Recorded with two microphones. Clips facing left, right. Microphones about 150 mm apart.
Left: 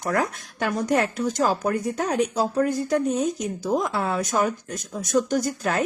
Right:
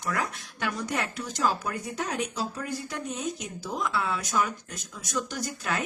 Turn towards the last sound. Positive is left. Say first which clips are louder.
# left 8 dB
turn(degrees=45)  # may be behind; listen again after turning